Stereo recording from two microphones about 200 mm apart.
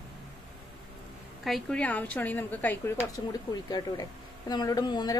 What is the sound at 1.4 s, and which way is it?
A woman's voice, centre (ahead or behind).